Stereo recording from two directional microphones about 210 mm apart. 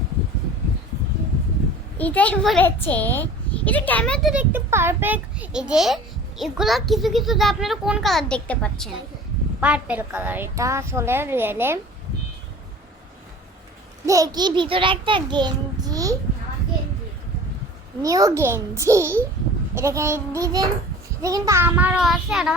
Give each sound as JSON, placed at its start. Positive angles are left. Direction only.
{"t": 2.0, "sound": "a child's voice", "side_deg": 5}
{"t": 9.6, "sound": "a woman's voice", "side_deg": -5}
{"t": 14.0, "sound": "a child's voice", "side_deg": -15}
{"t": 18.0, "sound": "a woman's voice", "side_deg": -15}